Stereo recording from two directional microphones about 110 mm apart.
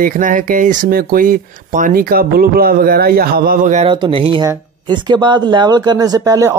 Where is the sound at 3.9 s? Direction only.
50° right (ahead or behind).